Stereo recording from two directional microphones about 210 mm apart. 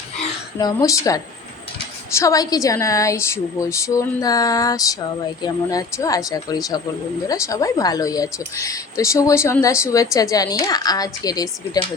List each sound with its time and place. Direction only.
0.6 s a woman's voice: 15° left (ahead or behind)